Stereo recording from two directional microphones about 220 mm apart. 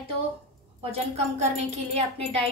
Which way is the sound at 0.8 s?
30° right (ahead or behind).